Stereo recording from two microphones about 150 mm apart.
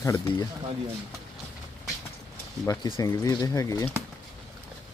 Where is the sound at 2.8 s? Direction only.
35° left (ahead or behind).